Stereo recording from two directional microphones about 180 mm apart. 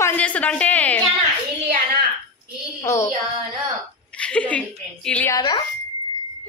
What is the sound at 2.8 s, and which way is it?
Speech, 15° left (ahead or behind).